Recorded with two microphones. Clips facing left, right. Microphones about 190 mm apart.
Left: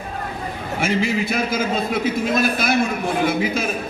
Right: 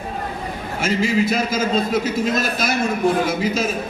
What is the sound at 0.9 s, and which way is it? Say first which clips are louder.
A man's voice: right 3 dB; 55° left (ahead or behind).